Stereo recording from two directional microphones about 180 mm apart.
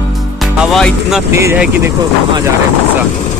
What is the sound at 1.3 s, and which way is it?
Speech, 15° right (ahead or behind).